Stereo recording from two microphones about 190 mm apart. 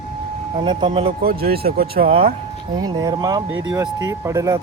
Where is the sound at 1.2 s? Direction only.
55° right (ahead or behind).